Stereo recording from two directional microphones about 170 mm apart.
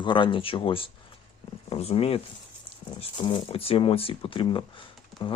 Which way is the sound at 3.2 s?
30° left (ahead or behind).